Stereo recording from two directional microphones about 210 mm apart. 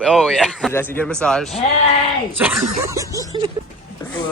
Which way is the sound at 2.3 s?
5° right (ahead or behind).